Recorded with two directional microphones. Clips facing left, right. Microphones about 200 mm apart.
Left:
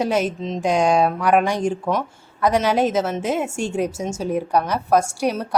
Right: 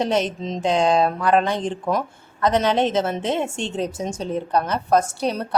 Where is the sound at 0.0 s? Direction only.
10° left (ahead or behind).